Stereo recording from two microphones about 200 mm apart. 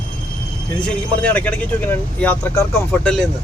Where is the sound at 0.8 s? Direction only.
5° left (ahead or behind).